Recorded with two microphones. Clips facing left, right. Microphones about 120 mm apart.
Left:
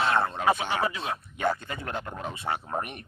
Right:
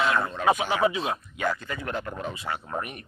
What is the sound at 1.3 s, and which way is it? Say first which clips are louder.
Speech: left 1 dB; 30° left (ahead or behind).